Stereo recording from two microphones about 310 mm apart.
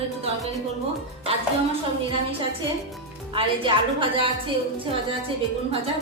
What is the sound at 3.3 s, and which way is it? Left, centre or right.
A woman's voice, centre.